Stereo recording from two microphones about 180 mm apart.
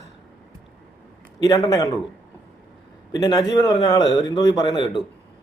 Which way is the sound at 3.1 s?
25° left (ahead or behind).